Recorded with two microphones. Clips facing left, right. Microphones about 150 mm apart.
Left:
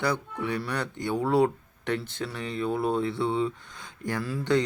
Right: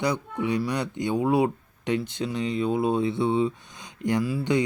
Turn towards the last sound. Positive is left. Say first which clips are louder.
# right 2 dB
turn(degrees=-15)  # may be behind; listen again after turning